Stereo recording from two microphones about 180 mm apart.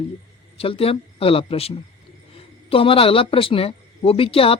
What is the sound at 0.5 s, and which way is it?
Speech, 30° left (ahead or behind).